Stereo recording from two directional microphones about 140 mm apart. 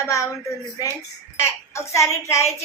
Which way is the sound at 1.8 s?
20° left (ahead or behind).